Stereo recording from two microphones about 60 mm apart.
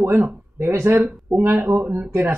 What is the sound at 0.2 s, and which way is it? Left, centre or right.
A woman's voice, right.